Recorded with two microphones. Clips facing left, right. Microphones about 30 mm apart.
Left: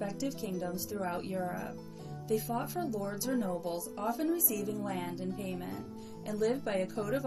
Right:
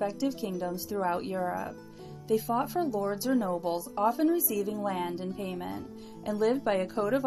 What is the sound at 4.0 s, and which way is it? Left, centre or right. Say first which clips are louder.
A woman's voice: right 7 dB; right.